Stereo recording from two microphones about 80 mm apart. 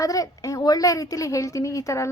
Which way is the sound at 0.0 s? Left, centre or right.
Left.